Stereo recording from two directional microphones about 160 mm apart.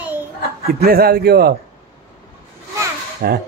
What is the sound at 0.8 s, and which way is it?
Speech, 70° right (ahead or behind).